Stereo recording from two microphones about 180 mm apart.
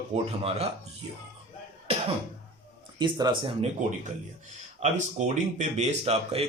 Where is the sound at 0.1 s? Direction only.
35° right (ahead or behind).